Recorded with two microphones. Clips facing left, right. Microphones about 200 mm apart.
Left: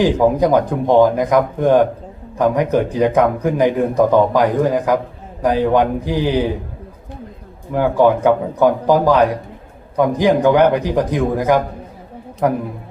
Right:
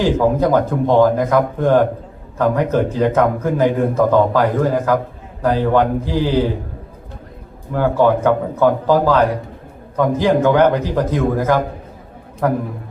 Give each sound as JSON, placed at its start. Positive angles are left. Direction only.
{"t": 0.0, "sound": "a man's voice", "side_deg": 15}
{"t": 7.7, "sound": "a man's voice", "side_deg": 15}